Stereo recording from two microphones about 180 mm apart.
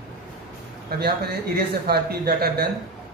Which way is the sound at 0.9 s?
60° right (ahead or behind).